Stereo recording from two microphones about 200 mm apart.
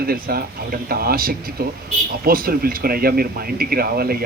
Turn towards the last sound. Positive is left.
turn(degrees=-50)  # may be behind; listen again after turning